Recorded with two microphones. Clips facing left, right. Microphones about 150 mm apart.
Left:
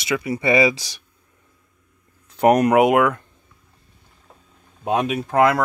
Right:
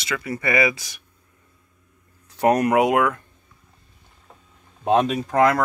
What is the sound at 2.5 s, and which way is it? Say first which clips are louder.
Speech: left 3 dB; 15° left (ahead or behind).